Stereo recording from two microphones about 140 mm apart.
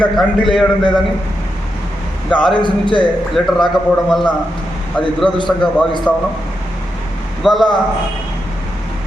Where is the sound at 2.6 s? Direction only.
35° left (ahead or behind).